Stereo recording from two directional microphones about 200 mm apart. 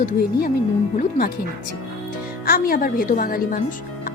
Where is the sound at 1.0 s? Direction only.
50° left (ahead or behind).